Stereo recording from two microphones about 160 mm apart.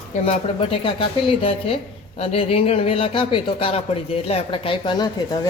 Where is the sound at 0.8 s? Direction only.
35° left (ahead or behind).